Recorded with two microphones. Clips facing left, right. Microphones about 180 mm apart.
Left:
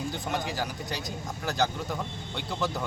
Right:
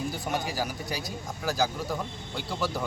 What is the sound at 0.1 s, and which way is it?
Speech, 5° right (ahead or behind).